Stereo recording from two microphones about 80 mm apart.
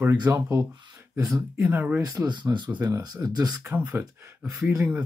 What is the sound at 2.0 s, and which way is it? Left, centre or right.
Speech, right.